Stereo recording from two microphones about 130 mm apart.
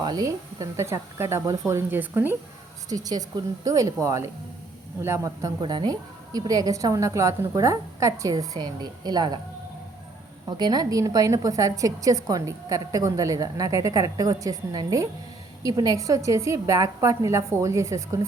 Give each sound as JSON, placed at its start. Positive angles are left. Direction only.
{"t": 0.0, "sound": "a woman's voice", "side_deg": -30}
{"t": 2.9, "sound": "a woman's voice", "side_deg": -30}
{"t": 10.6, "sound": "a woman's voice", "side_deg": -30}